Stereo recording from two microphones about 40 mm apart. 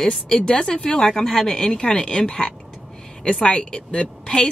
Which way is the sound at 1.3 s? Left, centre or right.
Centre.